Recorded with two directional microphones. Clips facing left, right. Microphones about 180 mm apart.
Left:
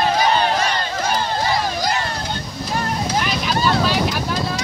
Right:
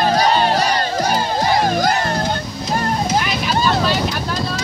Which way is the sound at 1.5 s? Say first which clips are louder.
Right 5 dB; 50° right (ahead or behind).